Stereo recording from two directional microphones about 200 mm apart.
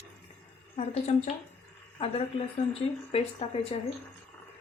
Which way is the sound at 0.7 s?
30° left (ahead or behind).